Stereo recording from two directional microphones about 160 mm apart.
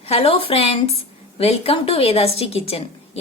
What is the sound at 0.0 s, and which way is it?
A woman's voice, 40° left (ahead or behind).